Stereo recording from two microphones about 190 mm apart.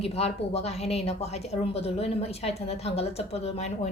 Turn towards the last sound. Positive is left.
turn(degrees=30)  # may be behind; listen again after turning